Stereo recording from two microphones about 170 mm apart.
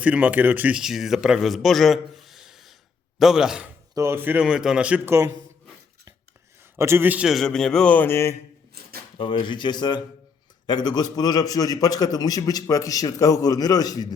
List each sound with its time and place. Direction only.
0.0 s a man's voice: 10° right (ahead or behind)
3.9 s speech: 15° right (ahead or behind)
6.7 s a man's voice: 15° right (ahead or behind); by 8.4 s 15° left (ahead or behind)
9.1 s a man's voice: 30° left (ahead or behind)